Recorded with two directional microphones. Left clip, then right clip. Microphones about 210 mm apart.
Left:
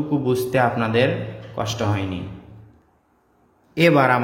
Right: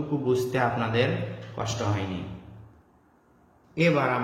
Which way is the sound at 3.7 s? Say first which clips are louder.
Left 7 dB; 40° left (ahead or behind).